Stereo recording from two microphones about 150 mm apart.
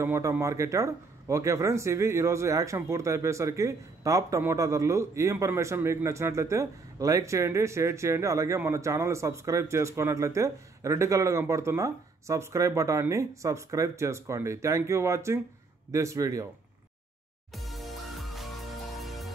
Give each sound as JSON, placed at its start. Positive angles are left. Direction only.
{"t": 0.0, "sound": "speech", "side_deg": -15}
{"t": 17.5, "sound": "music", "side_deg": 0}